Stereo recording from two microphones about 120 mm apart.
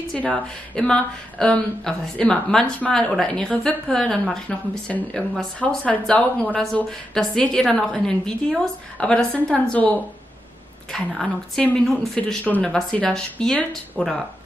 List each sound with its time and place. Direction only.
0.1 s a woman's voice: 5° left (ahead or behind)